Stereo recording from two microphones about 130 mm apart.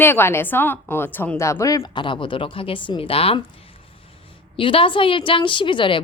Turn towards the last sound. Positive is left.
turn(degrees=40)  # may be behind; listen again after turning